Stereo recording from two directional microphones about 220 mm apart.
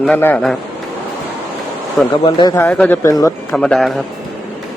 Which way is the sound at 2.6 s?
5° left (ahead or behind).